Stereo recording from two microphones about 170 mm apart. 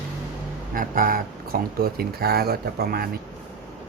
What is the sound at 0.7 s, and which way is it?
Speech, 55° right (ahead or behind).